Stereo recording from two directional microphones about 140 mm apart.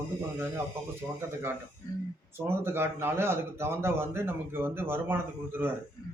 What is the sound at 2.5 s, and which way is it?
A man's voice, 15° right (ahead or behind).